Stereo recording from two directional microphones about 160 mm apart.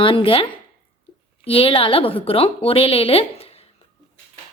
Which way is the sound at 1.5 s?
35° left (ahead or behind).